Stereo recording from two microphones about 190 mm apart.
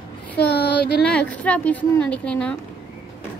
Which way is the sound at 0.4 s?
60° left (ahead or behind).